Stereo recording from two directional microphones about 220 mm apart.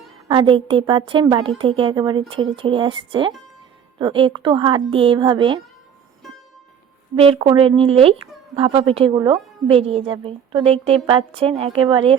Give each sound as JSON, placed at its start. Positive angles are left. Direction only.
{"t": 0.3, "sound": "a woman's voice", "side_deg": -20}
{"t": 7.2, "sound": "a woman's voice", "side_deg": -25}